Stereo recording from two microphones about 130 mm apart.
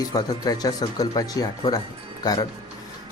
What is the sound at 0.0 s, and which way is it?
Speech, 30° left (ahead or behind).